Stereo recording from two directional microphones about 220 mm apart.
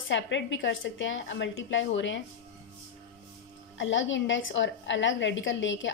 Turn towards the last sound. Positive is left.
turn(degrees=60)  # may be behind; listen again after turning